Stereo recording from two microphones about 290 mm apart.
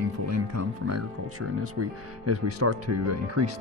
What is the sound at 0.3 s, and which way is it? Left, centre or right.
Speech, right.